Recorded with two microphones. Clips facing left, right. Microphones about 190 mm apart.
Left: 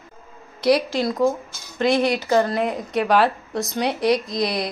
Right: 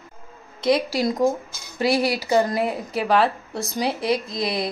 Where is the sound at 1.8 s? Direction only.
10° right (ahead or behind).